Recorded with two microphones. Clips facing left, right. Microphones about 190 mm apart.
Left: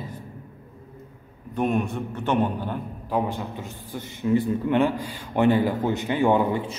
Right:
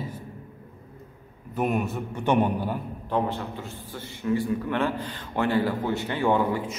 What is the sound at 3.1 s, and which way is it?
A man's voice, 15° left (ahead or behind).